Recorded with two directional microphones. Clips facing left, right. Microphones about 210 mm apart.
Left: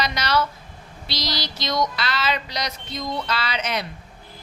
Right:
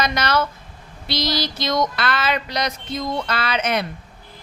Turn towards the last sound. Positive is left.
turn(degrees=-55)  # may be behind; listen again after turning